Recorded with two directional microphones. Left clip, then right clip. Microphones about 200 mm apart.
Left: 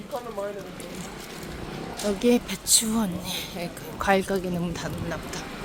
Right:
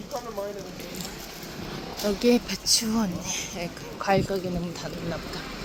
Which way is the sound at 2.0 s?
Centre (ahead or behind).